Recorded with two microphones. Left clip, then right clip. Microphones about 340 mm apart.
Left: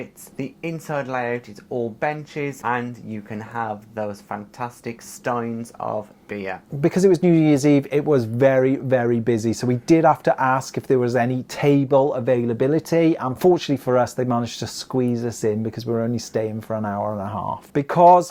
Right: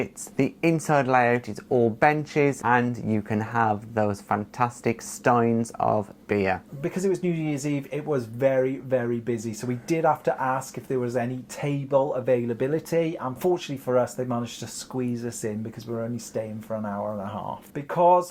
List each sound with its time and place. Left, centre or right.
0.0 s speech: right
6.8 s speech: left
12.2 s speech: left
15.9 s speech: left